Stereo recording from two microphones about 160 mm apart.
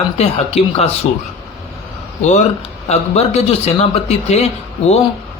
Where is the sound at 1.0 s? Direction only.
45° left (ahead or behind).